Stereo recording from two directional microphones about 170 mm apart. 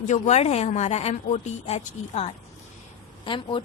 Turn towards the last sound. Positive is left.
turn(degrees=30)  # may be behind; listen again after turning